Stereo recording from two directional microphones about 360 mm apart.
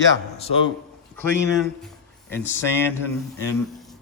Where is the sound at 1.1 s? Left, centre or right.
Centre.